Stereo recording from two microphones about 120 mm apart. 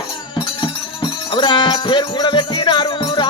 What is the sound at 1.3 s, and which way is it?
Music, 40° left (ahead or behind).